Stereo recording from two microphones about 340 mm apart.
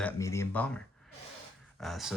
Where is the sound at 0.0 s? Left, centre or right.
Centre.